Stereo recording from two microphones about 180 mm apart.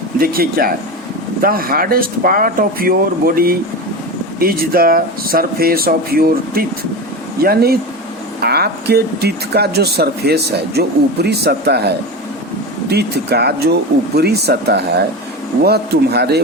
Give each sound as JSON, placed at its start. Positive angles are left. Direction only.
{"t": 0.2, "sound": "speech", "side_deg": -55}
{"t": 12.9, "sound": "speech", "side_deg": -65}